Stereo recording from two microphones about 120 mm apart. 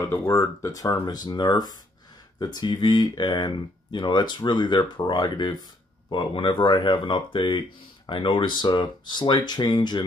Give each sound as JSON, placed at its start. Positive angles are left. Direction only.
{"t": 0.0, "sound": "speech", "side_deg": 20}